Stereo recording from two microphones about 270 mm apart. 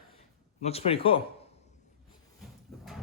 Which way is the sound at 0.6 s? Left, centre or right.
Left.